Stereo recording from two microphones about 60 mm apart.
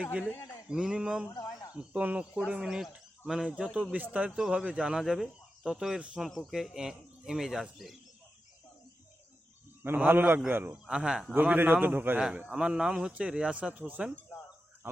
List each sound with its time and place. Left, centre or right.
0.0 s a man's voice: right
1.4 s a sound: left
1.7 s speech: centre
2.6 s a man's voice: centre
10.1 s a man's voice: right
10.7 s a man's voice: centre
11.3 s a man's voice: right
12.2 s a man's voice: centre